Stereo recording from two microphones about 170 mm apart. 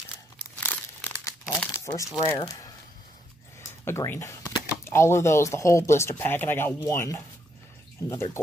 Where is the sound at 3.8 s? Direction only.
15° left (ahead or behind).